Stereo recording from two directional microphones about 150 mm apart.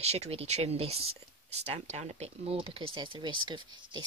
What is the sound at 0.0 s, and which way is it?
Speech, 45° right (ahead or behind).